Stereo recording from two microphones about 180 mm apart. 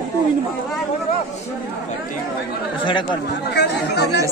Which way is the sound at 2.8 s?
25° left (ahead or behind).